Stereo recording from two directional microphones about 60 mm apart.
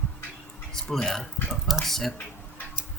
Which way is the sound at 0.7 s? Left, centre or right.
Centre.